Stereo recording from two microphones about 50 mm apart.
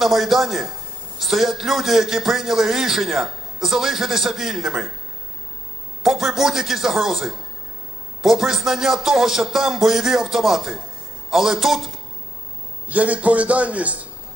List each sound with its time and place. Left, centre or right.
0.0 s a man's voice: centre
6.0 s a man's voice: centre
12.8 s a man's voice: right